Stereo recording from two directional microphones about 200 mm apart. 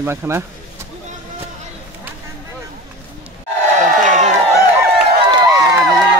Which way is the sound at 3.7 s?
35° right (ahead or behind).